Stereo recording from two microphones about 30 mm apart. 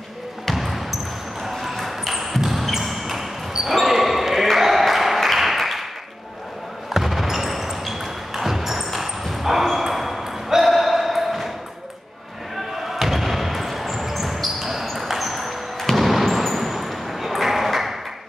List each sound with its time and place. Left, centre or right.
0.5 s basketball bounce: centre
4.6 s applause: centre
6.9 s basketball bounce: centre
9.4 s ping: centre
12.9 s basketball bounce: centre
16.0 s a sound: centre
16.4 s ping: centre